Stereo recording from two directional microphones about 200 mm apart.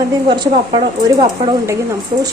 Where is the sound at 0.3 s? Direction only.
20° right (ahead or behind).